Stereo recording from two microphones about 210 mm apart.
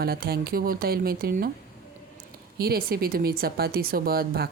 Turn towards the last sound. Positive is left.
turn(degrees=-45)  # may be behind; listen again after turning